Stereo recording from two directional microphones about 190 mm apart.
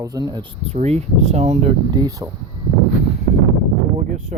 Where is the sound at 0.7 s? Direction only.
35° right (ahead or behind).